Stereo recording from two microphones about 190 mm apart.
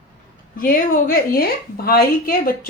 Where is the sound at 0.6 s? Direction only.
45° left (ahead or behind).